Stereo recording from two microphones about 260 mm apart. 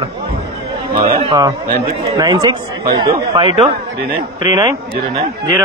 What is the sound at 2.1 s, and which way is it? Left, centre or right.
A man's voice, centre.